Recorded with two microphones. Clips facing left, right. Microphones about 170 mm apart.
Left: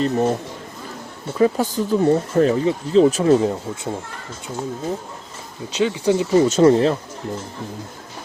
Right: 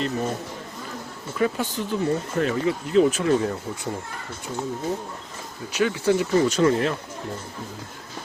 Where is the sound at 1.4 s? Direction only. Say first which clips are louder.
Left 7 dB; 40° left (ahead or behind).